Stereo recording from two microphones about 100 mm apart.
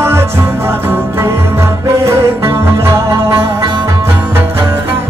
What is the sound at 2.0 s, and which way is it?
Music, 25° right (ahead or behind).